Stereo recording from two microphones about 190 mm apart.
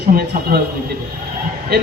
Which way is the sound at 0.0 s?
55° right (ahead or behind).